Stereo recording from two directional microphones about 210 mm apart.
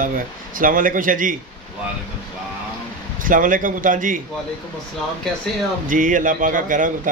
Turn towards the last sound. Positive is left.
turn(degrees=-40)  # may be behind; listen again after turning